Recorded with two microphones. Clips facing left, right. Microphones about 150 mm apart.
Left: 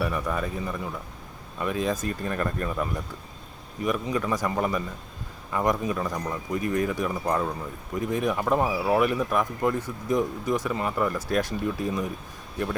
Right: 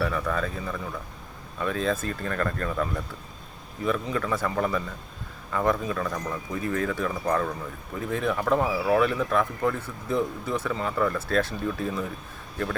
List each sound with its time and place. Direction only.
0.0 s speech: 15° left (ahead or behind)